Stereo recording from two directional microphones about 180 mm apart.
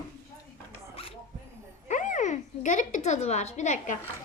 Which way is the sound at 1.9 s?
45° left (ahead or behind).